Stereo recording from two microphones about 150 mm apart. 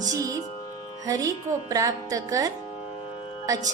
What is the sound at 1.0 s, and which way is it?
A woman's voice, 25° right (ahead or behind).